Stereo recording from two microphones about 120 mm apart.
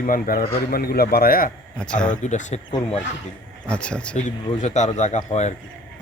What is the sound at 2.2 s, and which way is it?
Speech, 80° left.